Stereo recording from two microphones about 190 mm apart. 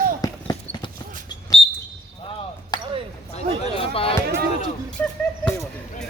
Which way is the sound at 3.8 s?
30° left (ahead or behind).